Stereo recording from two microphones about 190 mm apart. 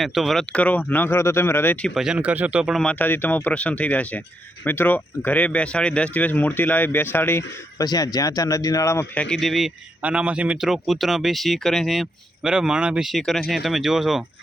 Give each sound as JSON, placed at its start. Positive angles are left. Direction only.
{"t": 0.0, "sound": "speech", "side_deg": 0}
{"t": 9.3, "sound": "speech", "side_deg": 0}